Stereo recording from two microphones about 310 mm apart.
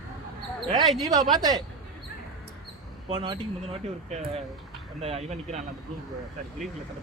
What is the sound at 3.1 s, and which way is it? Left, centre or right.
Speech, centre.